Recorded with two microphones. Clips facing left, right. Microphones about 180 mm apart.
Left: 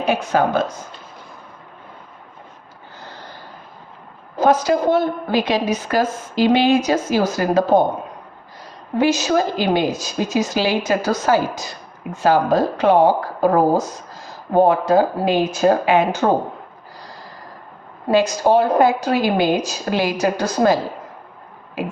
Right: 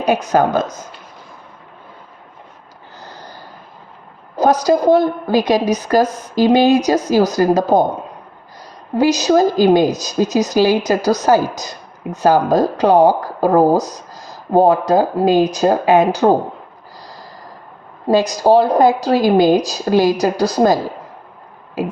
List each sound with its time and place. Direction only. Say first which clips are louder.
0.0 s a woman's voice: right 3 dB; 40° right (ahead or behind)
3.0 s a sound: right 2 dB; 40° right (ahead or behind)
4.4 s a woman's voice: right 2 dB; 40° right (ahead or behind)
9.0 s a woman's voice: right 4 dB; 40° right (ahead or behind)
18.1 s a woman's voice: right 3 dB; 40° right (ahead or behind)